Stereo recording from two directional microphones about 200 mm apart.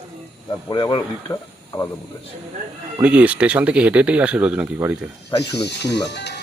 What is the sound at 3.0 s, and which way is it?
Speech, 5° right (ahead or behind).